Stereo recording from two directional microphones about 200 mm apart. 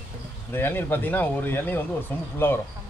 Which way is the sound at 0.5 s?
10° left (ahead or behind).